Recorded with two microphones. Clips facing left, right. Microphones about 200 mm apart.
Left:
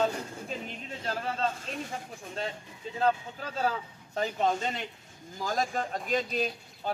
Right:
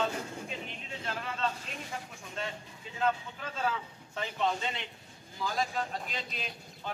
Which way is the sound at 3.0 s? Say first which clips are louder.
Left 3 dB; 35° left (ahead or behind).